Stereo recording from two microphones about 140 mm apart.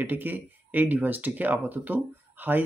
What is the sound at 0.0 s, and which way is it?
Speech, 15° right (ahead or behind).